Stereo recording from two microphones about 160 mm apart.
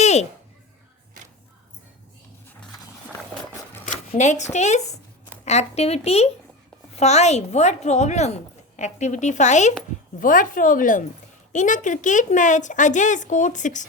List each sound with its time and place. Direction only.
0.0 s music: 45° left (ahead or behind)
4.1 s a woman's voice: 45° left (ahead or behind)